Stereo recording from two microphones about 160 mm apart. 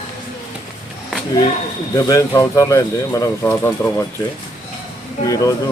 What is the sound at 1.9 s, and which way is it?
Speech, 20° left (ahead or behind).